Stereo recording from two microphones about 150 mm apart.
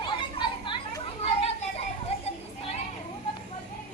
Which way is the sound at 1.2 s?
45° left (ahead or behind).